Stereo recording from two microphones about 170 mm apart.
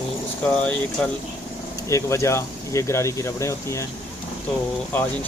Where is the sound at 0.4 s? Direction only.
5° left (ahead or behind).